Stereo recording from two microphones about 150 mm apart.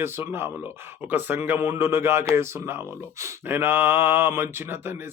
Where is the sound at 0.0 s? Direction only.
15° right (ahead or behind).